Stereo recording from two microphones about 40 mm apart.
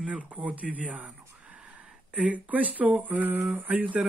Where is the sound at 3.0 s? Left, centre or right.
Right.